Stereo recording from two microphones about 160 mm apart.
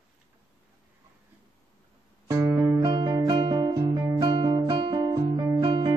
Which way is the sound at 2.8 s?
25° right (ahead or behind).